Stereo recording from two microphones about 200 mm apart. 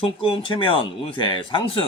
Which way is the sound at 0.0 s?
25° left (ahead or behind).